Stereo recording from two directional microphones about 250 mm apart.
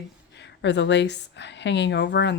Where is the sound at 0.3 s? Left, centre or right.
Left.